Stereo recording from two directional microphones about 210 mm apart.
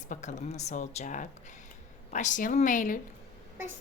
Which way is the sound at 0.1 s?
35° left (ahead or behind).